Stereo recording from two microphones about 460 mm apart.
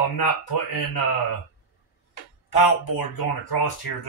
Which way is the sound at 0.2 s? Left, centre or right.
Left.